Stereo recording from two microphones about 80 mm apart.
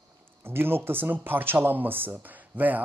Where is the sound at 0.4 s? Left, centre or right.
Right.